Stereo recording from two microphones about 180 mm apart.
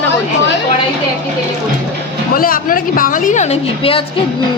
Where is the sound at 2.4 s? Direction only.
50° left (ahead or behind).